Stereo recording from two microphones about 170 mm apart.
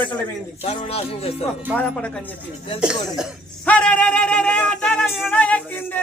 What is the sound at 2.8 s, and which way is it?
Cough, 5° right (ahead or behind).